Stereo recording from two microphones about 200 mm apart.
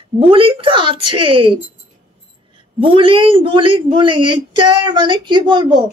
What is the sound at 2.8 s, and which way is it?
A man's voice, 25° right (ahead or behind).